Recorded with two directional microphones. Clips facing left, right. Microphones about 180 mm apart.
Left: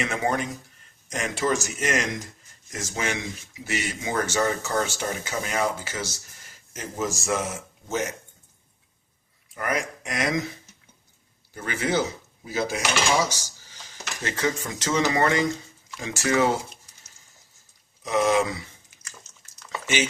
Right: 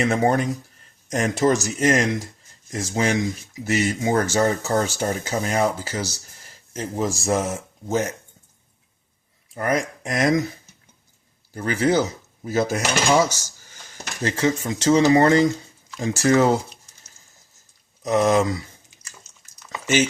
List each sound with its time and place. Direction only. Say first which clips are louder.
0.0 s speech: right 6 dB; 40° right (ahead or behind)
9.6 s speech: right 5 dB; 35° right (ahead or behind)
11.5 s speech: right 6 dB; 40° right (ahead or behind)
12.5 s cutlery: right 5 dB; 45° right (ahead or behind)
16.0 s speech: right 5 dB; 40° right (ahead or behind)
18.0 s speech: right 4 dB; 40° right (ahead or behind)